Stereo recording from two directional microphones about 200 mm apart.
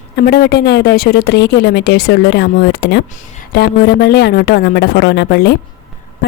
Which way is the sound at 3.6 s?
55° left (ahead or behind).